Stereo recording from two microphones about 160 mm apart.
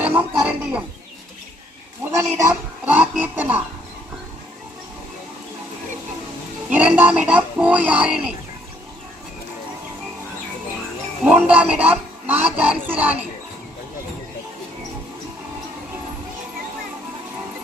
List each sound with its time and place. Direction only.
0.0 s a sound: 10° right (ahead or behind)
2.1 s speech: 20° right (ahead or behind)
6.7 s speech: 10° right (ahead or behind)
11.3 s speech: 10° right (ahead or behind)